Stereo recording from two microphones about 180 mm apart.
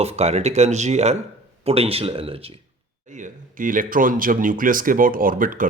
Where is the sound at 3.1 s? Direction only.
45° right (ahead or behind).